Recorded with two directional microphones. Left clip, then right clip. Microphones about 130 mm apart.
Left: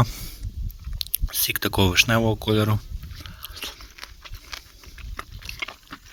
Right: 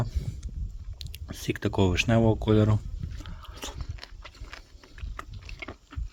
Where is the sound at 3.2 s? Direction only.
25° right (ahead or behind).